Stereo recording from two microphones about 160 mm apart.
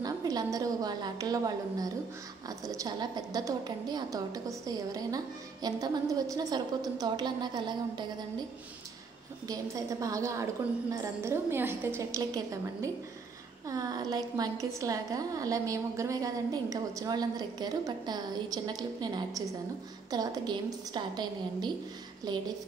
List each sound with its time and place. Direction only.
0.0 s a woman's voice: 25° right (ahead or behind)
9.5 s a woman's voice: 20° right (ahead or behind)